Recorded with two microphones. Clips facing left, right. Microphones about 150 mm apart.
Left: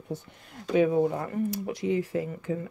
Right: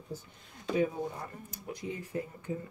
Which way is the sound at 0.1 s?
80° left.